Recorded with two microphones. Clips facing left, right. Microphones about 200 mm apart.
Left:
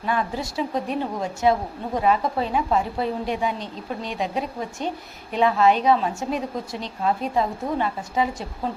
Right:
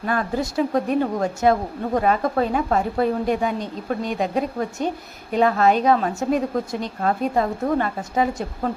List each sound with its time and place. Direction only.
0.0 s a woman's voice: 50° right (ahead or behind)